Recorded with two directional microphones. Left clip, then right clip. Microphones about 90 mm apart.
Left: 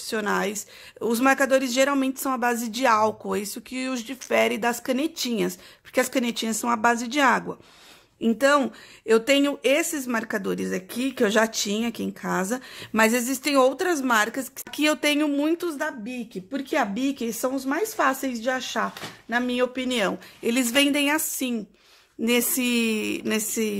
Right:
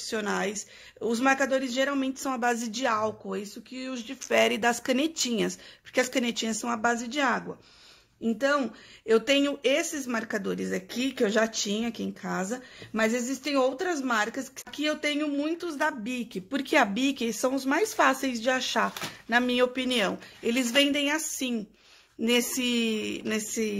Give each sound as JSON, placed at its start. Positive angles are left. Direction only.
{"t": 0.0, "sound": "speech", "side_deg": 40}
{"t": 4.0, "sound": "speech", "side_deg": 35}
{"t": 4.3, "sound": "speech", "side_deg": 20}
{"t": 9.0, "sound": "speech", "side_deg": 30}
{"t": 14.7, "sound": "a woman's voice", "side_deg": 70}
{"t": 16.1, "sound": "speech", "side_deg": -10}
{"t": 16.9, "sound": "speech", "side_deg": 20}
{"t": 19.9, "sound": "speech", "side_deg": 50}